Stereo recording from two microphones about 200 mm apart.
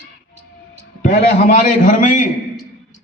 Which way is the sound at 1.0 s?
40° left (ahead or behind).